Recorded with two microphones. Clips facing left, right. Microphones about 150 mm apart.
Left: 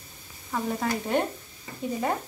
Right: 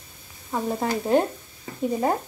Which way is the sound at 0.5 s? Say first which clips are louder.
Right 3 dB; 25° right (ahead or behind).